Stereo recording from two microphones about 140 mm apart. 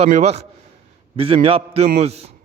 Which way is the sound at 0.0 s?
50° right (ahead or behind).